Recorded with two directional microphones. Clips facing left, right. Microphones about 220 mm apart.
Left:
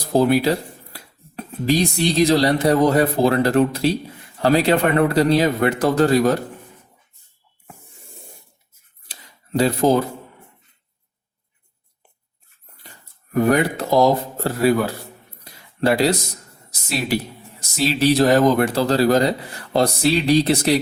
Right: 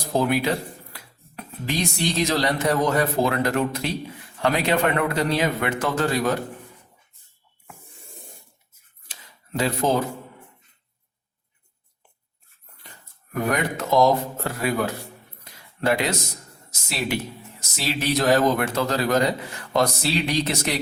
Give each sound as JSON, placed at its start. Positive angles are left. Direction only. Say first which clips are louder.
{"t": 0.1, "sound": "speech", "louder": "left 6 dB", "side_deg": 35}
{"t": 9.0, "sound": "tick-tock", "louder": "left 2 dB", "side_deg": 35}
{"t": 13.5, "sound": "speech", "louder": "left 3 dB", "side_deg": 35}
{"t": 15.4, "sound": "a sound", "louder": "left 4 dB", "side_deg": 35}
{"t": 17.6, "sound": "speech", "louder": "left 8 dB", "side_deg": 30}